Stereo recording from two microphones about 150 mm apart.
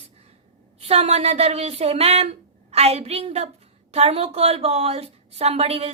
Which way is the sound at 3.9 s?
45° right (ahead or behind).